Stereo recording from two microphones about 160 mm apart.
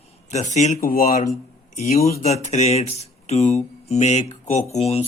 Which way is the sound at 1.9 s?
45° left (ahead or behind).